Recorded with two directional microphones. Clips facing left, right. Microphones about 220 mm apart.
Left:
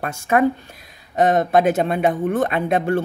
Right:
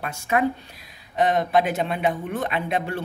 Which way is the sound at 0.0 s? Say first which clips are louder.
Left 5 dB; 50° left (ahead or behind).